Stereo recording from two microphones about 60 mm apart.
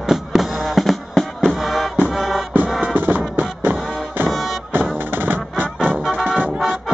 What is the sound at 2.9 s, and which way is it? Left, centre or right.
Music, right.